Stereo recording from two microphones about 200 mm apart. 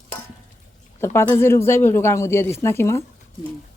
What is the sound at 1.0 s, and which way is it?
A woman's voice, 10° left (ahead or behind).